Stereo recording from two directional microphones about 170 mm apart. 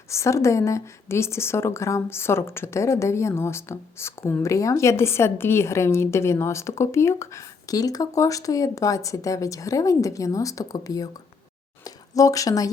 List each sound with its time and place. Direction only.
0.1 s a woman's voice: 15° left (ahead or behind)
12.1 s a woman's voice: 20° left (ahead or behind)